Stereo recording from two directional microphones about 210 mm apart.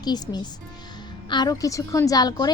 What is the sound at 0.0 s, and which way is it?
A woman's voice, 20° left (ahead or behind).